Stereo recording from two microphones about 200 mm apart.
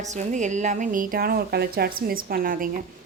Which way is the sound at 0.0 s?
35° right (ahead or behind).